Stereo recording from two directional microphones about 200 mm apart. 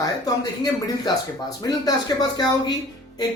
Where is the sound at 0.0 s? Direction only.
20° left (ahead or behind).